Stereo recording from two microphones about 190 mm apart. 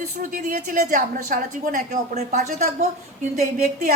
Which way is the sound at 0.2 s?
45° right (ahead or behind).